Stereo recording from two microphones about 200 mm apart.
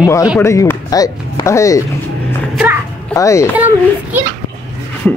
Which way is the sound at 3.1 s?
15° left (ahead or behind).